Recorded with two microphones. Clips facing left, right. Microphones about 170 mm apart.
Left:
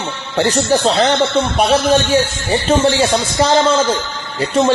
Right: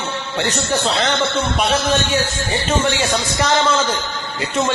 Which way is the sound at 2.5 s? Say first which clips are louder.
Left 6 dB; 30° left (ahead or behind).